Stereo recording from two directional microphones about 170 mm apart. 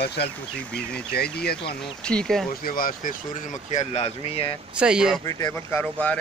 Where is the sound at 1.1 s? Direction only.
65° left (ahead or behind).